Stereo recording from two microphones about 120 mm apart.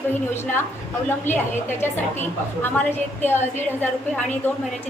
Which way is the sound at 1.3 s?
15° left (ahead or behind).